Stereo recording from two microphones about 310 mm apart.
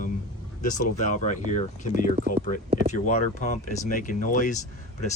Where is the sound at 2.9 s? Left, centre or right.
Left.